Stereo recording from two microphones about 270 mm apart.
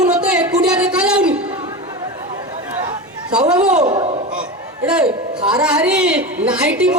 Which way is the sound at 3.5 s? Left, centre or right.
Centre.